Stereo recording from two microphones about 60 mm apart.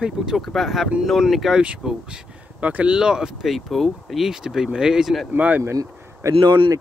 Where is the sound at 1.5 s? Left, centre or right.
Centre.